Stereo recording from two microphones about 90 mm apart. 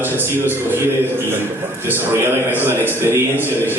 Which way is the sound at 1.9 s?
25° right (ahead or behind).